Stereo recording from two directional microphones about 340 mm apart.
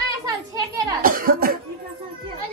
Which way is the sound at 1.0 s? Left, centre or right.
Right.